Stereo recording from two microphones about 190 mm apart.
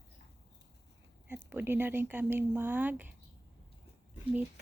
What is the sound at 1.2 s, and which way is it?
Speech, 10° right (ahead or behind).